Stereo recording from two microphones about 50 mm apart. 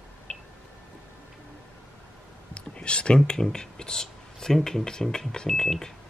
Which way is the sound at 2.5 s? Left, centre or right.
Left.